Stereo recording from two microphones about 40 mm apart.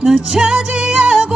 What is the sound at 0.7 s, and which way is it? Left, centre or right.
Music, right.